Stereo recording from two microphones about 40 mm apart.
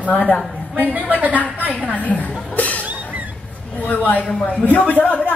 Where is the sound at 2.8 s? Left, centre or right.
Right.